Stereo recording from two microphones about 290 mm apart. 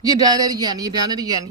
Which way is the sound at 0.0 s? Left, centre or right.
Centre.